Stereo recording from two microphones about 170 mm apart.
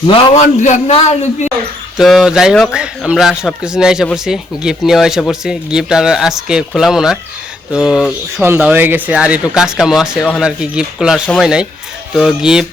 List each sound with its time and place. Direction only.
0.1 s a man's voice: 30° left (ahead or behind)
0.4 s a man's voice: 45° left (ahead or behind)
2.0 s speech: centre (ahead or behind)